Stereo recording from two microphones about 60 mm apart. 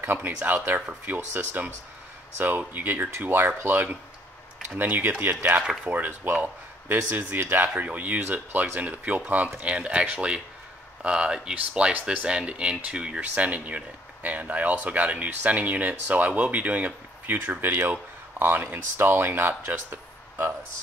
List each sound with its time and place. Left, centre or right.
0.0 s speech: right